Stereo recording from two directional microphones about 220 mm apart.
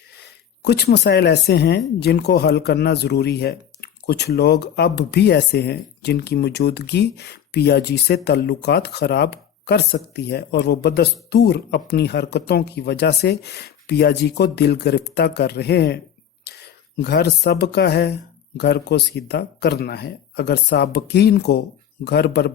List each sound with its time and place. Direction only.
0.6 s speech: 50° left (ahead or behind)
17.0 s speech: 50° left (ahead or behind)